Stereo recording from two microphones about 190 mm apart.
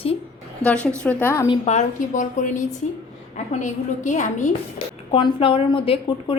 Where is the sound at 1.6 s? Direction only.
40° left (ahead or behind).